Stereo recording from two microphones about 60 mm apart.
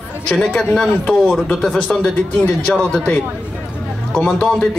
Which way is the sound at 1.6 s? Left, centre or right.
Centre.